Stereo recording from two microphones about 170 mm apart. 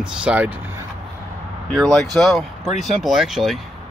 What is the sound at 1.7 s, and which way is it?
Speech, centre (ahead or behind).